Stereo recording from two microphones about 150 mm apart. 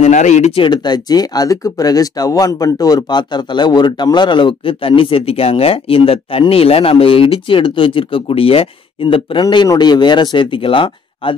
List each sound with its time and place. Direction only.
0.0 s speech: 50° left (ahead or behind); by 11.3 s 35° left (ahead or behind)